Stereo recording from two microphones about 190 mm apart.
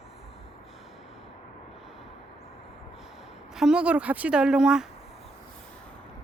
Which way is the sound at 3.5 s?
5° right (ahead or behind).